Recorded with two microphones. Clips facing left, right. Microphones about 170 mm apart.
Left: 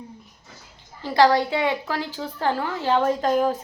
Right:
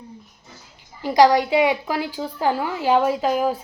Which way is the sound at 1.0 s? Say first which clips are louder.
Right 3 dB; 15° right (ahead or behind).